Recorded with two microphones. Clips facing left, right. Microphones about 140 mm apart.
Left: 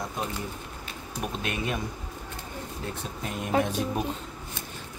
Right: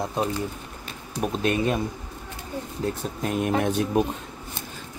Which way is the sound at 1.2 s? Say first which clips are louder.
Right 8 dB; 35° right (ahead or behind).